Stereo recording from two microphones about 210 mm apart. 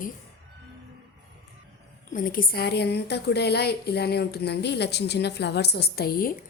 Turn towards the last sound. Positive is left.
turn(degrees=45)  # may be behind; listen again after turning